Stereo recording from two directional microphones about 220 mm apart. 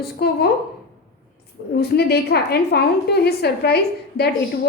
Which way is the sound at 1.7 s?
45° left (ahead or behind).